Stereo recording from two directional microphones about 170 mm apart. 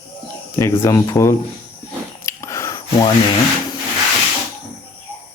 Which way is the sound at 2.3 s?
15° left (ahead or behind).